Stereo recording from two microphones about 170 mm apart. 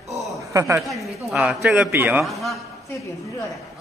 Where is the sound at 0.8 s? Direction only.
Centre (ahead or behind).